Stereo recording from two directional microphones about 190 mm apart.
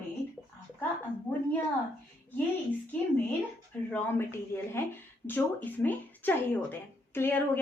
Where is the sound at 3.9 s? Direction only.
10° left (ahead or behind).